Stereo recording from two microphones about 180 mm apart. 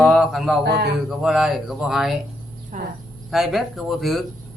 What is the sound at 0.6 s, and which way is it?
Speech, 65° right (ahead or behind).